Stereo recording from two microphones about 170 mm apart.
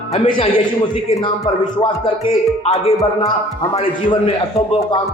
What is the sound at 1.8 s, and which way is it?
Speech, 35° left (ahead or behind).